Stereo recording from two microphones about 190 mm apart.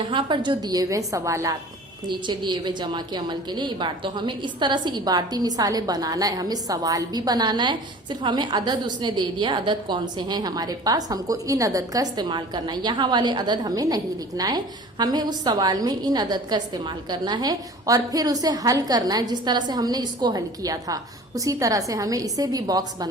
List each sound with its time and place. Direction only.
0.0 s a woman's voice: 25° right (ahead or behind)